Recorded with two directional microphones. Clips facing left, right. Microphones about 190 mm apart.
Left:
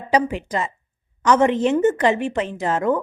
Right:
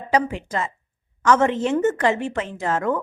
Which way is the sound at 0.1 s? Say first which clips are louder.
Left 2 dB; 20° left (ahead or behind).